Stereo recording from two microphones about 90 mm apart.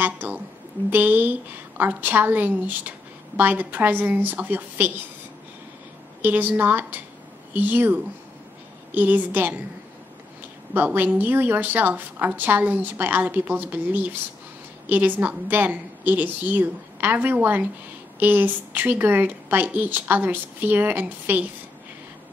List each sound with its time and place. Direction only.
0.0 s a sound: 20° right (ahead or behind)
0.8 s a woman's voice: 20° right (ahead or behind)
6.2 s a woman's voice: 20° right (ahead or behind)
10.7 s a woman's voice: 20° right (ahead or behind)